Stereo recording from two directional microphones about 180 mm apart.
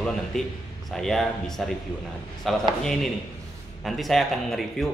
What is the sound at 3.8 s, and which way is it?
Mantra, centre (ahead or behind).